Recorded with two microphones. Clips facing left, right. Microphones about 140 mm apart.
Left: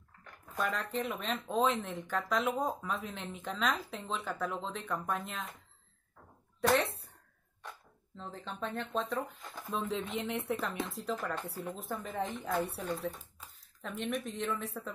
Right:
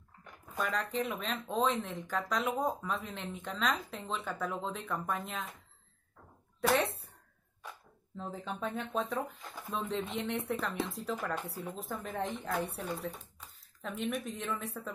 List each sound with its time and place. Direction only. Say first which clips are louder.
0.2 s dog: left 1 dB; 15° right (ahead or behind)
0.9 s speech: even; centre (ahead or behind)
6.6 s speech: left 1 dB; centre (ahead or behind)
8.2 s speech: right 2 dB; 5° right (ahead or behind)
11.1 s speech: right 1 dB; 10° right (ahead or behind)
11.4 s speech: left 1 dB; centre (ahead or behind)